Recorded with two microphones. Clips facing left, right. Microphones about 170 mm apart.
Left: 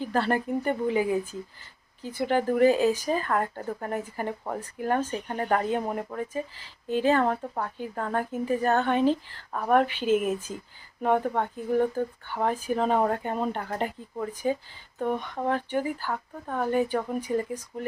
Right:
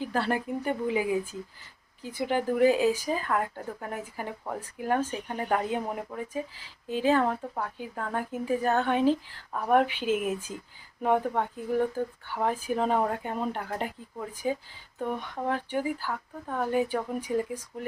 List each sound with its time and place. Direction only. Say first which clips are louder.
0.0 s speech: left 3 dB; 5° right (ahead or behind)